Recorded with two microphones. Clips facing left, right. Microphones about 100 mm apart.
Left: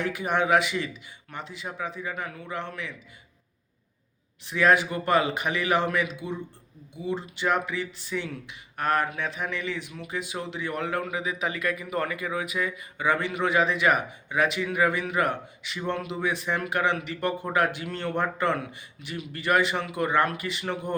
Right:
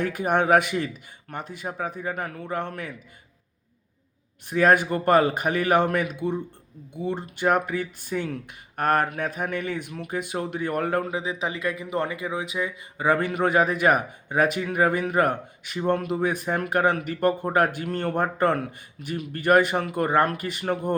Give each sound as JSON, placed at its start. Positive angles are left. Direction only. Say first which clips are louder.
{"t": 0.0, "sound": "speech", "louder": "right 3 dB", "side_deg": -50}
{"t": 4.4, "sound": "speech", "louder": "right 2 dB", "side_deg": -45}
{"t": 11.0, "sound": "speech", "louder": "right 2 dB", "side_deg": -30}
{"t": 13.1, "sound": "speech", "louder": "right 3 dB", "side_deg": -45}